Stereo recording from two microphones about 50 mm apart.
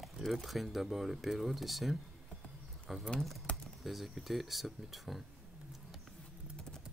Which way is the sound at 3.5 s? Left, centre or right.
Left.